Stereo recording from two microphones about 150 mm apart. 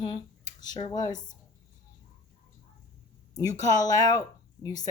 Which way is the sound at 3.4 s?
25° left (ahead or behind).